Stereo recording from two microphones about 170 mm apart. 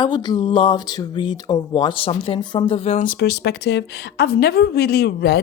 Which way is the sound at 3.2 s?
75° left (ahead or behind).